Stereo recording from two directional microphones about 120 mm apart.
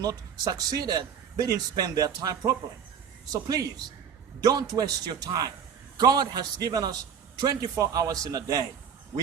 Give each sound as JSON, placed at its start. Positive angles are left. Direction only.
{"t": 0.0, "sound": "a man's voice", "side_deg": -30}